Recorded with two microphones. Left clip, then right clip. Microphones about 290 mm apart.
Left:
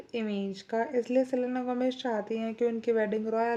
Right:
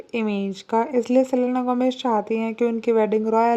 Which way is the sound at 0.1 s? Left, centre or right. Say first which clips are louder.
Right 8 dB; right.